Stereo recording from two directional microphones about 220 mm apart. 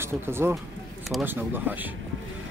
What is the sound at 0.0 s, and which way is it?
Speech, 10° right (ahead or behind).